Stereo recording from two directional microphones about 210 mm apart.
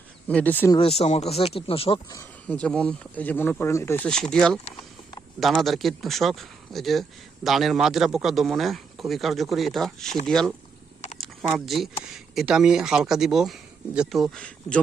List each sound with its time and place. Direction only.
0.3 s speech: 5° left (ahead or behind)
0.8 s speech: 30° left (ahead or behind)
2.1 s a man's voice: 5° left (ahead or behind)